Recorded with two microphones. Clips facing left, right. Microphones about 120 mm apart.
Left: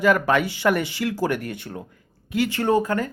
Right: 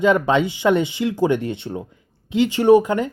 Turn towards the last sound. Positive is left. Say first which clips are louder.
# right 7 dB
turn(degrees=-20)  # may be behind; listen again after turning